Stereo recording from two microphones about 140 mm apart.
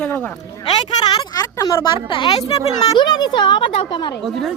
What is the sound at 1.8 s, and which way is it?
Speech, 35° left (ahead or behind).